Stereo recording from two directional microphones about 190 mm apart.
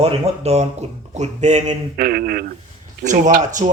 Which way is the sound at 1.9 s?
50° right (ahead or behind).